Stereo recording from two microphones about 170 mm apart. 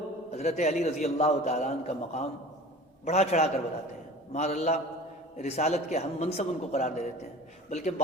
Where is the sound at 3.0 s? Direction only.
40° left (ahead or behind).